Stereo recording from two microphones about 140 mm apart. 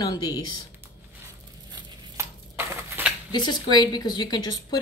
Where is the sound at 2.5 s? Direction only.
15° right (ahead or behind).